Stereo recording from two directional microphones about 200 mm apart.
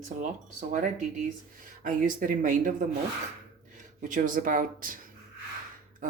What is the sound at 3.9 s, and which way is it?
Speech, 40° right (ahead or behind).